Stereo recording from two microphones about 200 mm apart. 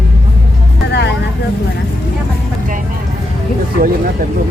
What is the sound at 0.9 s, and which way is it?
Music, 60° left (ahead or behind).